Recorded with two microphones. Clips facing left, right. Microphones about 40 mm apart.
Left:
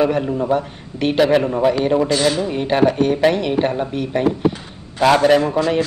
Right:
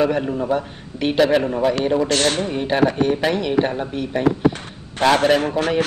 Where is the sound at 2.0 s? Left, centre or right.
Right.